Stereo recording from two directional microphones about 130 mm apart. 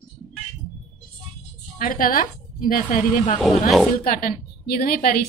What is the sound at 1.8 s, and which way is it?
Speech, 90° left.